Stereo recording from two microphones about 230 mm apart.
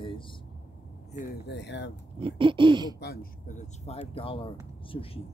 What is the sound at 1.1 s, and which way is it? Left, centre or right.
Speech, left.